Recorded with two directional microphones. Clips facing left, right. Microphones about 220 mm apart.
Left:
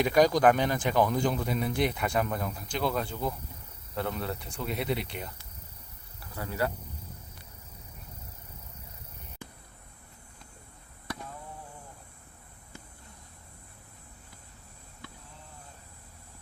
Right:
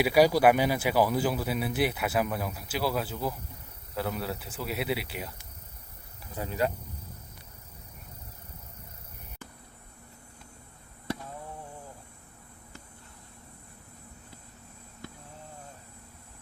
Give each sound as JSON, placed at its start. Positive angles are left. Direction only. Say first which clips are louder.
{"t": 0.0, "sound": "speech", "louder": "right 1 dB", "side_deg": -10}
{"t": 6.3, "sound": "speech", "louder": "right 2 dB", "side_deg": -15}